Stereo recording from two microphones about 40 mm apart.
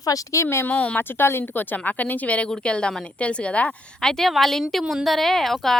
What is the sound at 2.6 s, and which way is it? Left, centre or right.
A woman's voice, left.